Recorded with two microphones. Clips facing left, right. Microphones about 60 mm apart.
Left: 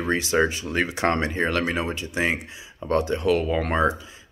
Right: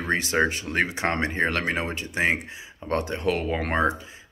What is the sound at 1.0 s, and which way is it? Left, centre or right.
Speech, right.